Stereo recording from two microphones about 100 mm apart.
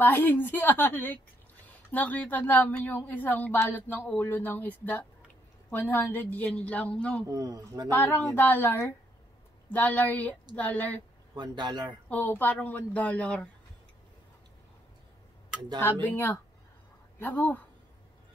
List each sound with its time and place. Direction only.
0.0 s a woman's voice: 20° left (ahead or behind)
7.2 s speech: 35° right (ahead or behind)
7.9 s a woman's voice: 15° left (ahead or behind)
11.3 s speech: 45° right (ahead or behind)
12.1 s a woman's voice: 20° left (ahead or behind)
15.8 s a woman's voice: 20° left (ahead or behind)